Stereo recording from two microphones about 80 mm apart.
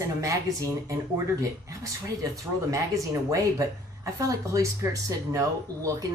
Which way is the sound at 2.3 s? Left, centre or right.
Right.